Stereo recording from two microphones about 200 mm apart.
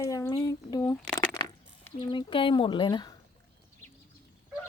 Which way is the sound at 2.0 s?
25° left (ahead or behind).